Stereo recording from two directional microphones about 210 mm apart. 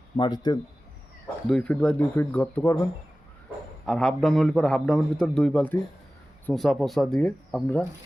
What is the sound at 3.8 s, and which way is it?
A man's voice, centre (ahead or behind).